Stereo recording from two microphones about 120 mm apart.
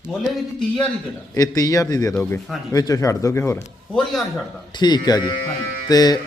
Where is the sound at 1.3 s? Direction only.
30° left (ahead or behind).